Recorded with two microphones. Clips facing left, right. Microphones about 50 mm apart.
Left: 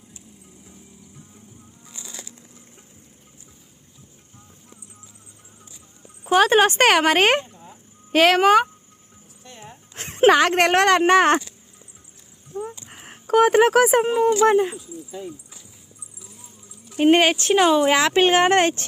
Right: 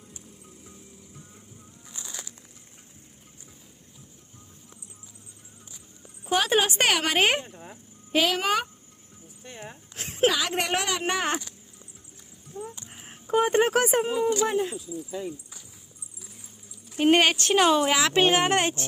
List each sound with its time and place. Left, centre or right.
6.2 s speech: left
7.4 s a sound: right
8.1 s speech: left
8.4 s speech: left
9.9 s a sound: left
10.4 s speech: left
12.5 s a sound: left
13.2 s speech: left
14.0 s speech: left
14.5 s speech: left
17.0 s speech: centre
17.8 s speech: left